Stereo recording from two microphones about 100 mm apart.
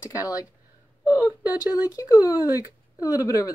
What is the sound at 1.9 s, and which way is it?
Speech, 35° left (ahead or behind).